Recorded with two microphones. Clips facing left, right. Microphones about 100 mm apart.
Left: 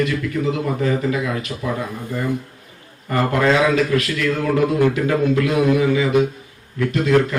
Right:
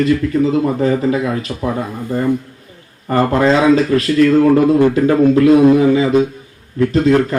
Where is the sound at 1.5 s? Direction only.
45° right (ahead or behind).